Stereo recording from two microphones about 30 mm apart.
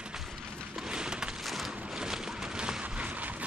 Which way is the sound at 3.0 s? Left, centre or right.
Right.